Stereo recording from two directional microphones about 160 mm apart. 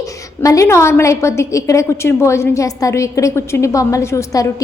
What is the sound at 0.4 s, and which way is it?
A woman's voice, 20° left (ahead or behind).